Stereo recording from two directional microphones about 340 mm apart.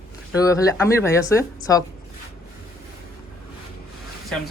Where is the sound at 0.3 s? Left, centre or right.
Centre.